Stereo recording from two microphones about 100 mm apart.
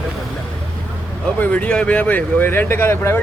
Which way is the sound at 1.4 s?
15° left (ahead or behind).